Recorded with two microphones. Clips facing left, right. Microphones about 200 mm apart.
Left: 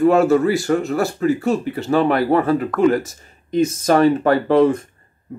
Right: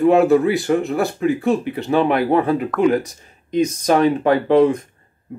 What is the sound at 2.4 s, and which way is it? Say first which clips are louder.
Speech: even; 15° right (ahead or behind).